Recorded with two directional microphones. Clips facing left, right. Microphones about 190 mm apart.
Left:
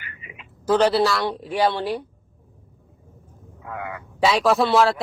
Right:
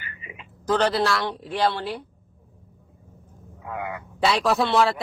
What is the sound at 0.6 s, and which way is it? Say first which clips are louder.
Speech: left 4 dB; 10° left (ahead or behind).